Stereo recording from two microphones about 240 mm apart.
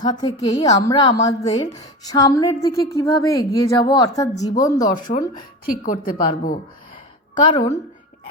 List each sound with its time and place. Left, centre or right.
0.0 s a woman's voice: centre
4.9 s speech: left